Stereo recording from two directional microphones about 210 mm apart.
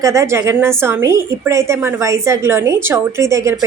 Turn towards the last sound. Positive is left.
turn(degrees=-15)  # may be behind; listen again after turning